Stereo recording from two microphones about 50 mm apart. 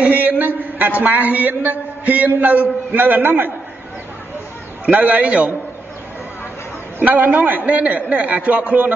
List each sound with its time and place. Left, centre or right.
0.0 s a man's voice: right
4.8 s a man's voice: right
7.0 s a man's voice: right